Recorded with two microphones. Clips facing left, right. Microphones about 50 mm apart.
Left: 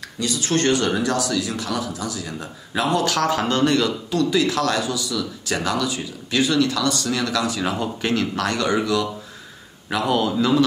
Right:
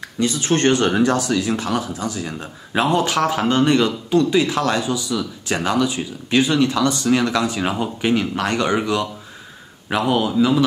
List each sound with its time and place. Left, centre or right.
0.2 s speech: right
10.1 s a man's voice: centre